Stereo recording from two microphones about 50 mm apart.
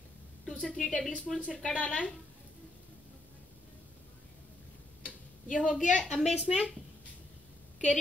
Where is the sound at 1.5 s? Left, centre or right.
Centre.